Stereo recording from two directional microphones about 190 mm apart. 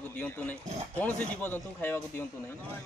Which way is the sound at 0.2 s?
10° left (ahead or behind).